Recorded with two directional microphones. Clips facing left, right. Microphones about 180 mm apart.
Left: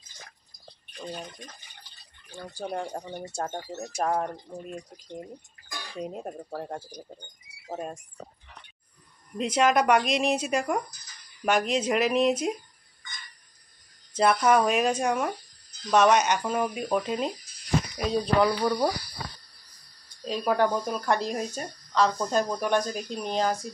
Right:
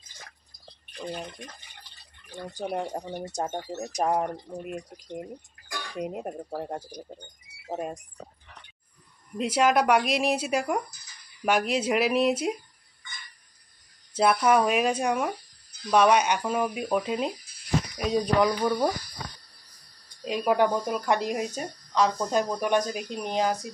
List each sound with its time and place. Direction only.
2.6 s speech: 5° right (ahead or behind)
9.4 s speech: 5° right (ahead or behind)
14.1 s speech: 10° right (ahead or behind)
18.6 s speech: 10° left (ahead or behind)
20.2 s speech: 15° right (ahead or behind)